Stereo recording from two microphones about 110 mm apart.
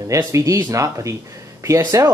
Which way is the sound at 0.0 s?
30° right (ahead or behind).